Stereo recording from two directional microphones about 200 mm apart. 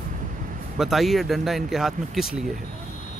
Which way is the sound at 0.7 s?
Centre (ahead or behind).